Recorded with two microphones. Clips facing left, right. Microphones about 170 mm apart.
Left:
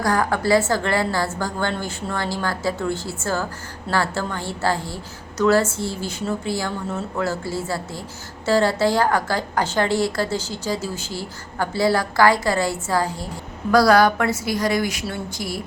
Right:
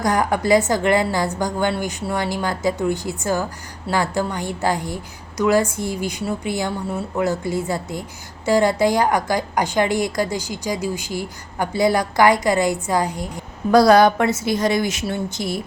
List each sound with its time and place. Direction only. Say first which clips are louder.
0.0 s a woman's voice: right 1 dB; 20° right (ahead or behind)